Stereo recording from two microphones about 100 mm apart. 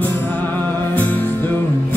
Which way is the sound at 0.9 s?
20° left (ahead or behind).